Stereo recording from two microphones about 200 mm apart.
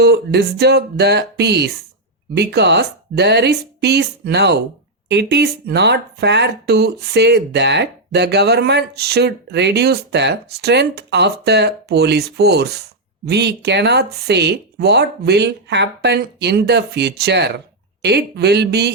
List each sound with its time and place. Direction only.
0.0 s speech: 55° right (ahead or behind)